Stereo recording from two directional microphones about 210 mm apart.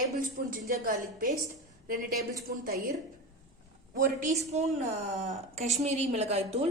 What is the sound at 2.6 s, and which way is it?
Speech, 45° right (ahead or behind).